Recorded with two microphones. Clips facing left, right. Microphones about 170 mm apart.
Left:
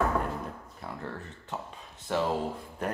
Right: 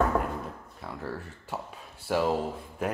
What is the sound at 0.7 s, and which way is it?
Speech, centre (ahead or behind).